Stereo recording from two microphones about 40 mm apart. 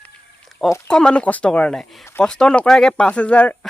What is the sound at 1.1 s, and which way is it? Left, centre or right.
Speech, left.